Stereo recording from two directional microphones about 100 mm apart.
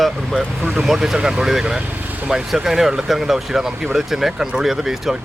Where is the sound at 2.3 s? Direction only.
5° right (ahead or behind).